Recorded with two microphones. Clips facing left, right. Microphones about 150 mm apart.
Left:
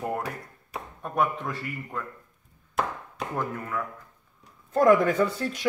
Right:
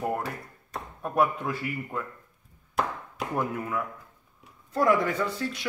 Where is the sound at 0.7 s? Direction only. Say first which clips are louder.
Right 2 dB; 5° right (ahead or behind).